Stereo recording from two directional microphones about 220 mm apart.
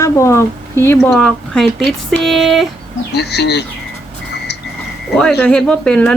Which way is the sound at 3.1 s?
50° left (ahead or behind).